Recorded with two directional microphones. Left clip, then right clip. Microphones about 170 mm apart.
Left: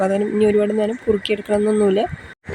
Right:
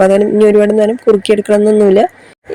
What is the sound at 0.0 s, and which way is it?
Speech, 40° right (ahead or behind).